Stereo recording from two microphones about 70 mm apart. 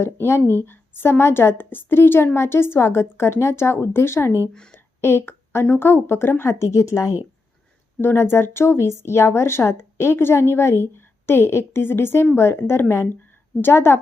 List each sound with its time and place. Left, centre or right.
0.0 s a woman's voice: left
8.0 s a woman's voice: left